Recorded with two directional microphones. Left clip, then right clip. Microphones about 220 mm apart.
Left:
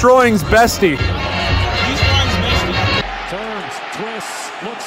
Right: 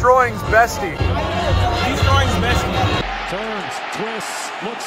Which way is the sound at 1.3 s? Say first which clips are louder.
Left 3 dB; 35° right (ahead or behind).